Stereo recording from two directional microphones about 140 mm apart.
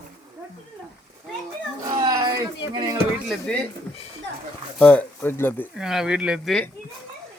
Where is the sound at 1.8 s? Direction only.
25° right (ahead or behind).